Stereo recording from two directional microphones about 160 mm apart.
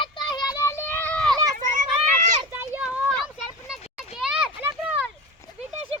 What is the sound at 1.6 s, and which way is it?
Run, 55° right (ahead or behind).